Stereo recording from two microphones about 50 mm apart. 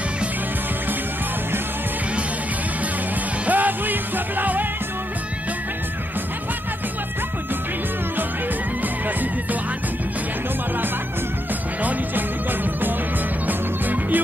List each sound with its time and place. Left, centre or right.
3.4 s music: right
13.5 s music: right